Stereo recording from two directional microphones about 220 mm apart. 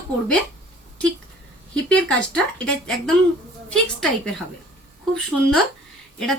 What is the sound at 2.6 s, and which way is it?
Speech, centre (ahead or behind).